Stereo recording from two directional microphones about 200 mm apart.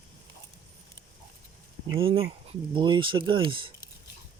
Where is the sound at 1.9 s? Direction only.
25° right (ahead or behind).